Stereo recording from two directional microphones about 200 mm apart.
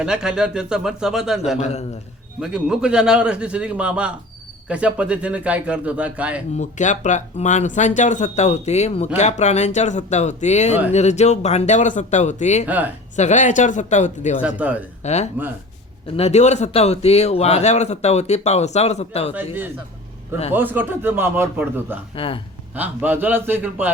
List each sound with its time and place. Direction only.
0.0 s a man's voice: 5° right (ahead or behind)
1.5 s a man's voice: 35° left (ahead or behind)
2.4 s a man's voice: 5° right (ahead or behind)
6.6 s a man's voice: 35° left (ahead or behind)
12.6 s speech: 10° right (ahead or behind)
13.1 s a man's voice: 35° left (ahead or behind)
14.4 s speech: 5° right (ahead or behind)
15.0 s a man's voice: 35° left (ahead or behind)
20.5 s speech: 10° right (ahead or behind)
22.1 s speech: 25° left (ahead or behind)
22.7 s speech: 10° right (ahead or behind)